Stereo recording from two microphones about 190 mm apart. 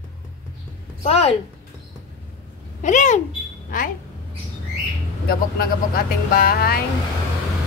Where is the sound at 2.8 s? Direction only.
40° left (ahead or behind).